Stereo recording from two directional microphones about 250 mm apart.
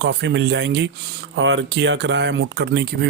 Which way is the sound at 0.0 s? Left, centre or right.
Right.